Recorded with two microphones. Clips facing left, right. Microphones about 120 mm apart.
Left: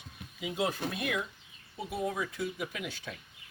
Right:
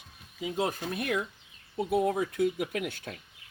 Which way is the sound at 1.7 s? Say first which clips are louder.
Right 7 dB; 60° right (ahead or behind).